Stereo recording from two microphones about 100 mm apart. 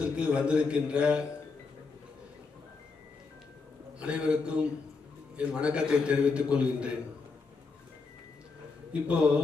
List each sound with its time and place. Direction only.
0.0 s a man's voice: 10° right (ahead or behind)
4.0 s a man's voice: 10° right (ahead or behind)
8.9 s a man's voice: 10° right (ahead or behind)